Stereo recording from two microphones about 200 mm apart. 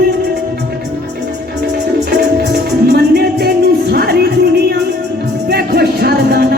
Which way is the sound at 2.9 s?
50° right (ahead or behind).